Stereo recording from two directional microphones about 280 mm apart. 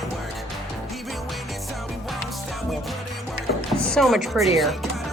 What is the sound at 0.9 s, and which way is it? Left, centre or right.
Music, centre.